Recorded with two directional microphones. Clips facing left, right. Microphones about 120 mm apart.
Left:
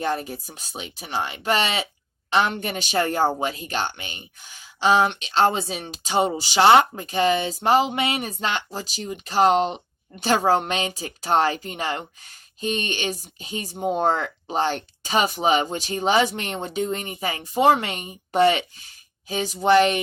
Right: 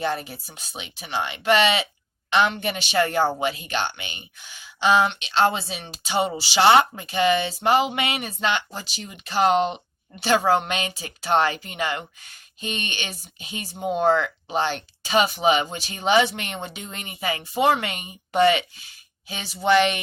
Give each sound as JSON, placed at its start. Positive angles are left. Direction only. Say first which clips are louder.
{"t": 0.0, "sound": "speech", "louder": "left 1 dB", "side_deg": 40}